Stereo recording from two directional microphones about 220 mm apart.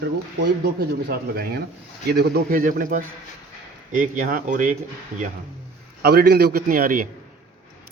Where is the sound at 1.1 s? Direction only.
45° right (ahead or behind).